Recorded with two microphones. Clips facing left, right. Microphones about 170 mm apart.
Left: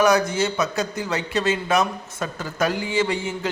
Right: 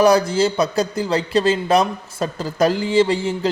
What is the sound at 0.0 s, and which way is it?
A man's voice, 30° right (ahead or behind).